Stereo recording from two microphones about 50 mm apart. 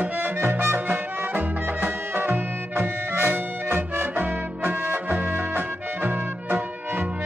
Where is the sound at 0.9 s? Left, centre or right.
Right.